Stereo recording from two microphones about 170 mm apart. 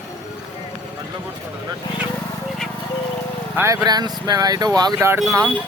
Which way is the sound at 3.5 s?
20° right (ahead or behind).